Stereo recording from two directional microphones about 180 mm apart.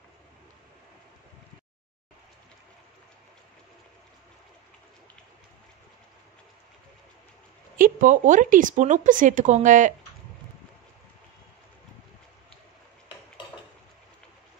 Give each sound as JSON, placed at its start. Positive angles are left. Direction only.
{"t": 7.7, "sound": "speech", "side_deg": -50}